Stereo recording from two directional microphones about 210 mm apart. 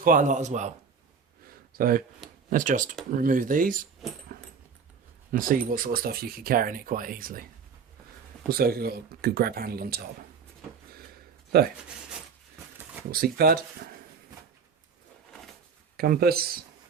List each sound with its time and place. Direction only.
0.0 s speech: 40° right (ahead or behind)
1.8 s speech: 40° right (ahead or behind)
4.3 s dog: 45° right (ahead or behind)
5.3 s speech: 40° right (ahead or behind)
8.4 s speech: 45° right (ahead or behind)
11.5 s speech: 45° right (ahead or behind)
12.7 s a sound: 10° right (ahead or behind)
13.1 s speech: 45° right (ahead or behind)
16.0 s speech: 45° right (ahead or behind)